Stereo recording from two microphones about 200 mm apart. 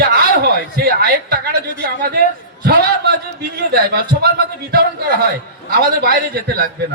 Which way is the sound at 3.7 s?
50° right (ahead or behind).